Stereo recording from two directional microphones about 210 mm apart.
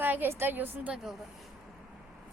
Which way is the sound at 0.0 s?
10° right (ahead or behind).